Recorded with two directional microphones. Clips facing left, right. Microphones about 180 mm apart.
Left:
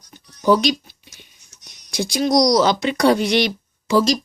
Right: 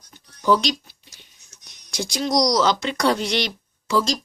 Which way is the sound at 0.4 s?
10° left (ahead or behind).